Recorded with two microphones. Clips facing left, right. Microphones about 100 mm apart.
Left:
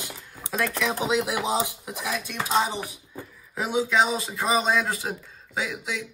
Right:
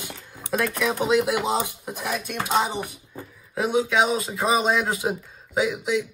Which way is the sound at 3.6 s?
Centre (ahead or behind).